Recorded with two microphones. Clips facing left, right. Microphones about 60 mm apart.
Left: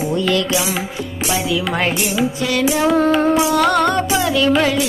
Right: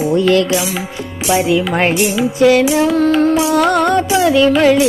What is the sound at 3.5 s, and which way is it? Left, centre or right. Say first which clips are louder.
Music: right 3 dB; centre.